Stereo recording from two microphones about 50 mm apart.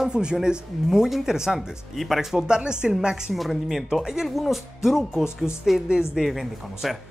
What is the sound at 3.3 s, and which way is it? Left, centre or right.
Speech, centre.